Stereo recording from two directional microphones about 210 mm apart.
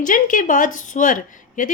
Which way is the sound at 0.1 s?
40° left (ahead or behind).